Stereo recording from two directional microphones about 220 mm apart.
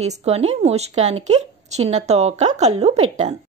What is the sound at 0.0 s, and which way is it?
A woman's voice, 30° right (ahead or behind).